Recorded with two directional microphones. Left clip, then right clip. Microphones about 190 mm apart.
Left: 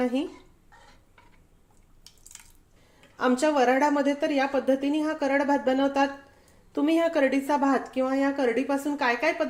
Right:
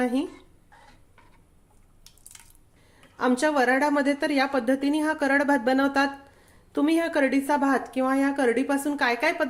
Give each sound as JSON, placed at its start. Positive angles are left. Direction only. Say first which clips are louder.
{"t": 0.0, "sound": "a woman's voice", "louder": "right 1 dB", "side_deg": -10}
{"t": 2.3, "sound": "squish", "louder": "left 1 dB", "side_deg": -10}
{"t": 3.2, "sound": "a woman's voice", "louder": "even", "side_deg": -10}